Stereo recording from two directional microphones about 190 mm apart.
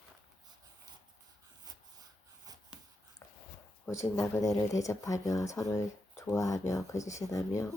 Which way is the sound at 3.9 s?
15° left (ahead or behind).